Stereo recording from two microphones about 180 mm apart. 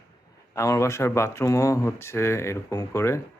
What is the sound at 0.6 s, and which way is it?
Speech, 15° left (ahead or behind).